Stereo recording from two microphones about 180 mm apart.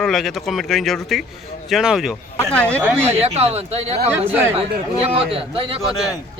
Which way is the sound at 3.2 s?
35° right (ahead or behind).